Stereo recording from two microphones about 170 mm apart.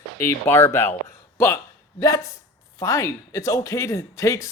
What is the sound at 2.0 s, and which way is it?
Speech, 20° left (ahead or behind).